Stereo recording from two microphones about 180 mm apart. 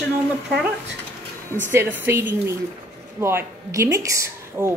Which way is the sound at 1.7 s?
10° right (ahead or behind).